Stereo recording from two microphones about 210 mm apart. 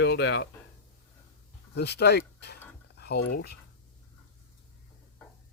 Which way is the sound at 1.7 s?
50° left (ahead or behind).